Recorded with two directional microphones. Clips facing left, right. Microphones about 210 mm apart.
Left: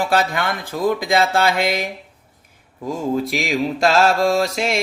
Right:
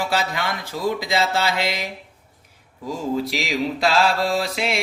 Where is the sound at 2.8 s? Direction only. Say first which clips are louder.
Left 3 dB; 50° left (ahead or behind).